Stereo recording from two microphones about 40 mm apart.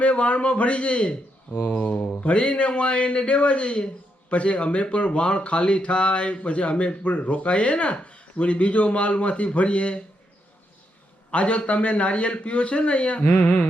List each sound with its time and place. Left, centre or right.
0.0 s speech: left
1.5 s mantra: left
2.2 s speech: left
11.3 s speech: left